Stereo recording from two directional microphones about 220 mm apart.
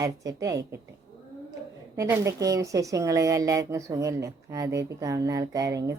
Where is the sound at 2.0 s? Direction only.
15° right (ahead or behind).